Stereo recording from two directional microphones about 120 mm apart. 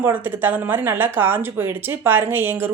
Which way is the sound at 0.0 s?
15° right (ahead or behind).